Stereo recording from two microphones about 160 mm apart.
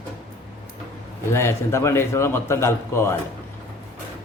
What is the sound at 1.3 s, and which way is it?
A man's voice, 15° left (ahead or behind).